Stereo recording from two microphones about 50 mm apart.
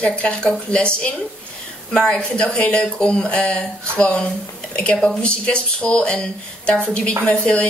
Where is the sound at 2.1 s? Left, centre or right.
Left.